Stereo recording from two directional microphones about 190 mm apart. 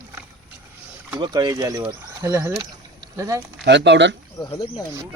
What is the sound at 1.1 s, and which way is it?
Speech, 25° right (ahead or behind).